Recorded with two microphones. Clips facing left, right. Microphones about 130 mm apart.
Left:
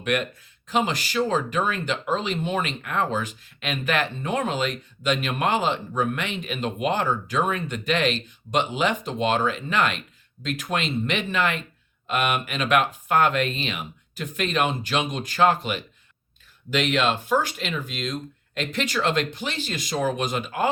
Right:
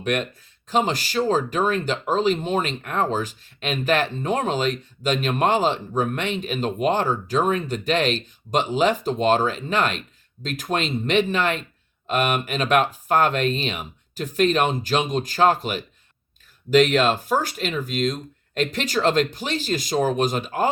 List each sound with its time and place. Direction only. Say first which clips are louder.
0.7 s speech: right 2 dB; 40° right (ahead or behind)